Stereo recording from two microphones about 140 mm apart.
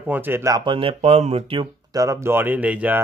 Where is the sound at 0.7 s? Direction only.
40° right (ahead or behind).